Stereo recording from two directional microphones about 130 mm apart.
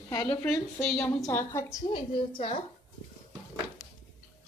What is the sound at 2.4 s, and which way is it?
Speech, 45° left (ahead or behind).